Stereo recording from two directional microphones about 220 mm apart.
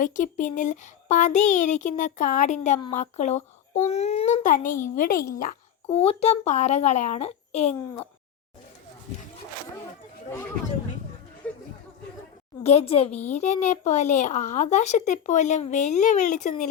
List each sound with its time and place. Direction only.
0.0 s a child's voice: 35° left (ahead or behind)
12.6 s a child's voice: 25° left (ahead or behind)